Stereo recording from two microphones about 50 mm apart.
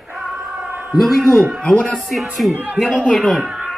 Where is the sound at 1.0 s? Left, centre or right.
Centre.